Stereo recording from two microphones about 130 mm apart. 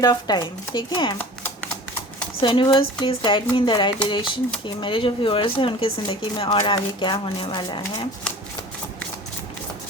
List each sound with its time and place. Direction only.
0.0 s speech: 30° left (ahead or behind)
2.4 s speech: 40° left (ahead or behind)